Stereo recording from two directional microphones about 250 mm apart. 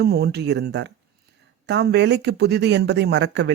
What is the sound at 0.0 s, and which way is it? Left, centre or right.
Speech, right.